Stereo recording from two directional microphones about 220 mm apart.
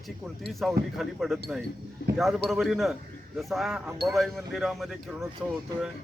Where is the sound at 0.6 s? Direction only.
Centre (ahead or behind).